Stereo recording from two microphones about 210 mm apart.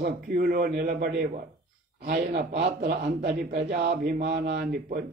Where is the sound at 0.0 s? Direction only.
45° right (ahead or behind).